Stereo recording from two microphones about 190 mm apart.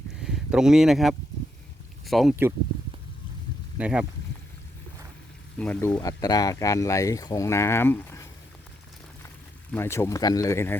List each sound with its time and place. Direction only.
0.2 s speech: 5° right (ahead or behind)
3.8 s speech: 5° right (ahead or behind)
5.5 s speech: 10° left (ahead or behind)
6.0 s speech: 20° left (ahead or behind)
9.7 s speech: 10° left (ahead or behind)